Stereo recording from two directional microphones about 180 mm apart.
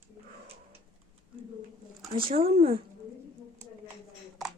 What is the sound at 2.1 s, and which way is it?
Speech, 30° right (ahead or behind).